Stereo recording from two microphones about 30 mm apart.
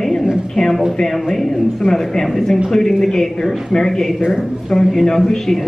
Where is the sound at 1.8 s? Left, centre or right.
Right.